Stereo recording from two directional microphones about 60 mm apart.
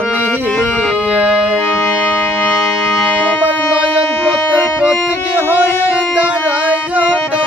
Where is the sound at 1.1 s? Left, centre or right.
Right.